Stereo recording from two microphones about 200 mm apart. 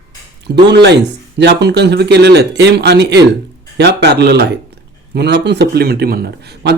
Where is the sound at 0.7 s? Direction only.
55° right (ahead or behind).